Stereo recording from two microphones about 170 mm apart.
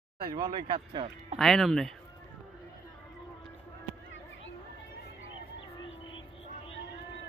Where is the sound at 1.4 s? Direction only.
Centre (ahead or behind).